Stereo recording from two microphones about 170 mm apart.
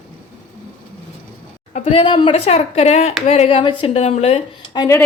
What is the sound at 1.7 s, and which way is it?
A woman's voice, 40° left (ahead or behind).